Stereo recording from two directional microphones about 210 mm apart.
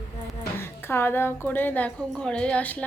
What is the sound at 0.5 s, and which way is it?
A woman's voice, 10° left (ahead or behind).